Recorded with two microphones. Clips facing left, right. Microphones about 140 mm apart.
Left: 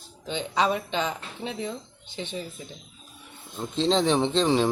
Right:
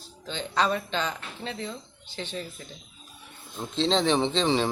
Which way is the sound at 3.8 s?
10° left (ahead or behind).